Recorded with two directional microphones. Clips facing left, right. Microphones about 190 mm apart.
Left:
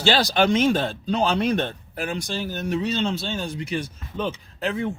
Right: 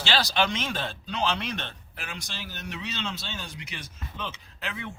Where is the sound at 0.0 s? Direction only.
45° left (ahead or behind).